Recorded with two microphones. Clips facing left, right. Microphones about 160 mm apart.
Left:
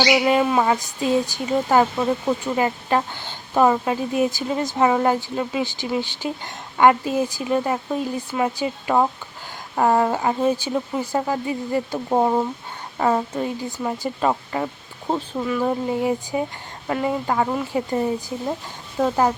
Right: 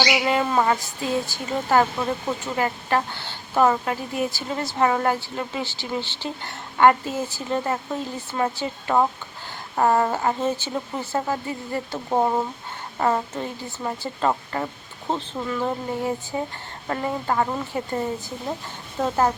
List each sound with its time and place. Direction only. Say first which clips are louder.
0.1 s speech: left 4 dB; 15° left (ahead or behind)